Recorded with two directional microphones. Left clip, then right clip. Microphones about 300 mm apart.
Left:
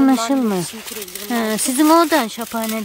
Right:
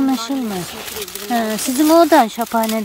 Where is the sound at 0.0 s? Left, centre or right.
Centre.